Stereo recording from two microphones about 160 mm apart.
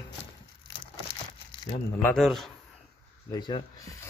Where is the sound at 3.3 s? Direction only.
30° left (ahead or behind).